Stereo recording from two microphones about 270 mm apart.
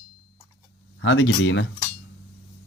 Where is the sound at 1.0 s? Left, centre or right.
Left.